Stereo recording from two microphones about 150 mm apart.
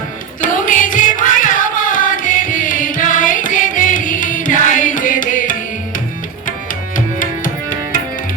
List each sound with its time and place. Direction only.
0.4 s music: 60° left (ahead or behind)
6.9 s music: 65° left (ahead or behind)